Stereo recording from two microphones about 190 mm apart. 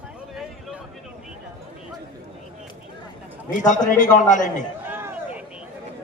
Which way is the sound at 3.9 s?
40° left (ahead or behind).